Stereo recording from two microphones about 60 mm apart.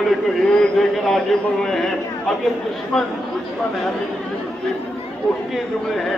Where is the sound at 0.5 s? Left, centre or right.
Centre.